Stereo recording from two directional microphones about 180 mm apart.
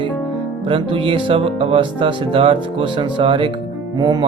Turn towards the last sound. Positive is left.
turn(degrees=-25)  # may be behind; listen again after turning